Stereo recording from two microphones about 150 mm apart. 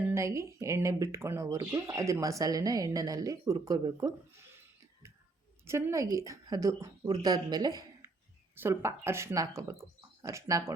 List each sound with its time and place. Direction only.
0.1 s speech: 20° right (ahead or behind)
5.6 s speech: 20° right (ahead or behind)